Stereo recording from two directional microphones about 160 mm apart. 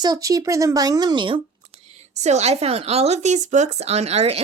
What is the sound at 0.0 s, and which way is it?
Speech, 20° right (ahead or behind).